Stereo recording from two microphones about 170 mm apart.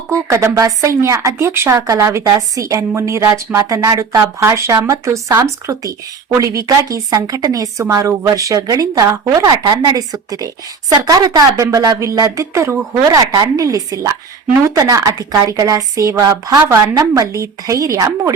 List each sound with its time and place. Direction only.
0.1 s a woman's voice: 15° right (ahead or behind)